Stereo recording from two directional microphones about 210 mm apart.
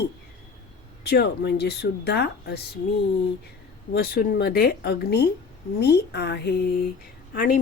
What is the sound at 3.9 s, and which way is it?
Speech, 45° left (ahead or behind).